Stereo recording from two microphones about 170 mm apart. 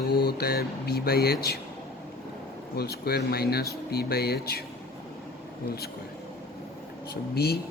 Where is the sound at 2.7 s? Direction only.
70° left (ahead or behind).